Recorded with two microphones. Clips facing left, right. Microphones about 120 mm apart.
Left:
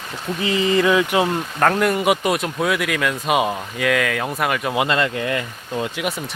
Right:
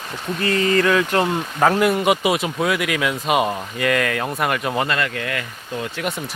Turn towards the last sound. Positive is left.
turn(degrees=0)  # may be behind; listen again after turning